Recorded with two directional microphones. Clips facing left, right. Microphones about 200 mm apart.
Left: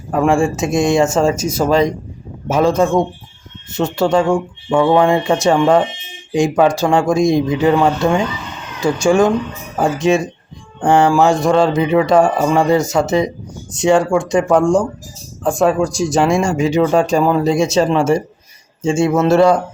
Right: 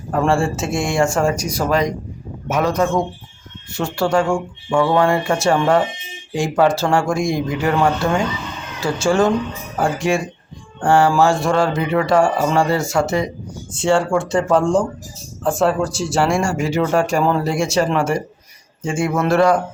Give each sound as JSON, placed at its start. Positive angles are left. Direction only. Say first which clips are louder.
{"t": 0.1, "sound": "speech", "louder": "left 3 dB", "side_deg": 15}